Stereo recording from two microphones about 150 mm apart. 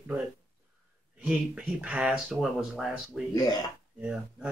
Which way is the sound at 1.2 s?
10° right (ahead or behind).